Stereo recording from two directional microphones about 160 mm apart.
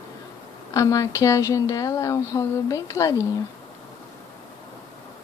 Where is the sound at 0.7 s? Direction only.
20° left (ahead or behind).